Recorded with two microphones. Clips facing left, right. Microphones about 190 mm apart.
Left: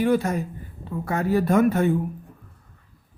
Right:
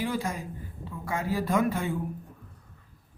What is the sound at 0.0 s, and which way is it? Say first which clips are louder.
Speech: left 9 dB; 65° left (ahead or behind).